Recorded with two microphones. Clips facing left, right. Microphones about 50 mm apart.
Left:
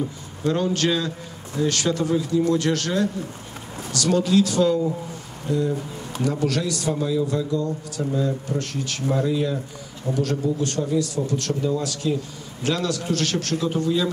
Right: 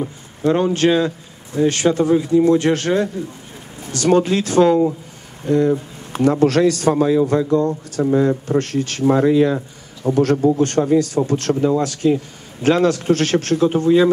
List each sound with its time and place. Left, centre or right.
0.5 s speech: right
10.0 s speech: right